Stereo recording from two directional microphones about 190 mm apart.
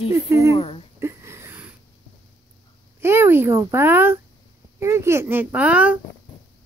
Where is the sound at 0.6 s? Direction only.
30° left (ahead or behind).